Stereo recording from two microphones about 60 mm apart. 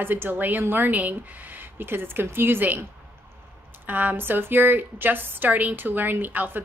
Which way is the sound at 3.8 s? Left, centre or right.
Right.